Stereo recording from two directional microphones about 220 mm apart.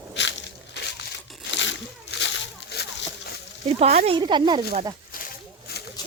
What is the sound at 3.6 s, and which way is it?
Speech, 30° right (ahead or behind).